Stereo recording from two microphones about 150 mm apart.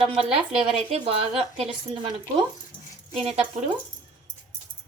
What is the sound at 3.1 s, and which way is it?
Speech, 45° right (ahead or behind).